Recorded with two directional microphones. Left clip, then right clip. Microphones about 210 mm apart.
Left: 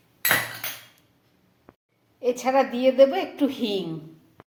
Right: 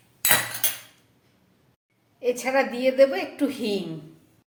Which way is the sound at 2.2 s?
5° left (ahead or behind).